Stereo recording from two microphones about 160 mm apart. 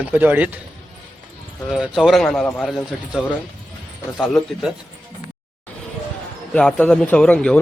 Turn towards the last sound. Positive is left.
turn(degrees=5)  # may be behind; listen again after turning